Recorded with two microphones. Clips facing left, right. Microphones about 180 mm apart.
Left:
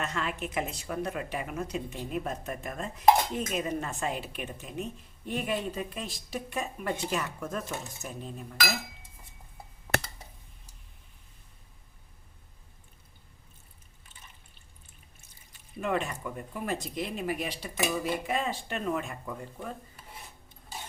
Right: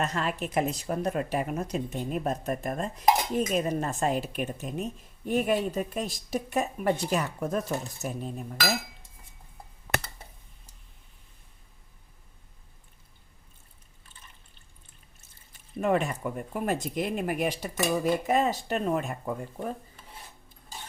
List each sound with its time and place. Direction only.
0.0 s a woman's voice: 40° right (ahead or behind)
15.8 s a woman's voice: 45° right (ahead or behind)